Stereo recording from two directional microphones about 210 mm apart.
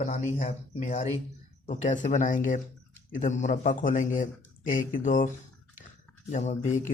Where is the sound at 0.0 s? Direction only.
35° left (ahead or behind).